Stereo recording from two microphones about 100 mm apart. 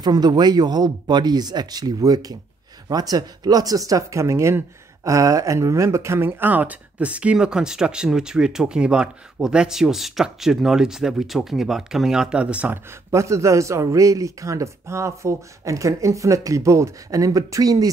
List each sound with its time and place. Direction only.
0.0 s speech: 45° right (ahead or behind); by 12.8 s 15° right (ahead or behind)
13.1 s a man's voice: 30° right (ahead or behind)